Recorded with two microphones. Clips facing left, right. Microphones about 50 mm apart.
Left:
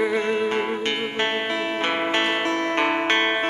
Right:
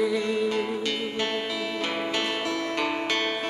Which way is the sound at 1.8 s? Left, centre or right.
Left.